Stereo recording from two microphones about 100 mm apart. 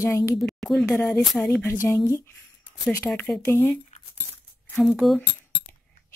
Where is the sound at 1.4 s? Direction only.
20° left (ahead or behind).